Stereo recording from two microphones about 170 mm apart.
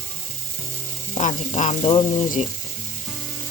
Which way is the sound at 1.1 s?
40° left (ahead or behind).